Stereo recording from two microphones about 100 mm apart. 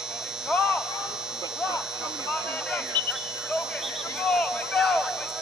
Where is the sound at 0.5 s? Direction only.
15° left (ahead or behind).